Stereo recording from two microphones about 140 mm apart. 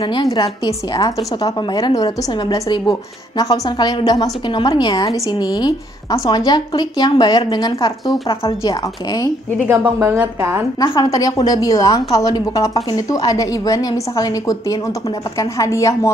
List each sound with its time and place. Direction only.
0.0 s a woman's voice: 35° left (ahead or behind)
8.6 s a woman's voice: 30° left (ahead or behind)
9.9 s a woman's voice: 20° right (ahead or behind)
10.8 s a woman's voice: 25° left (ahead or behind)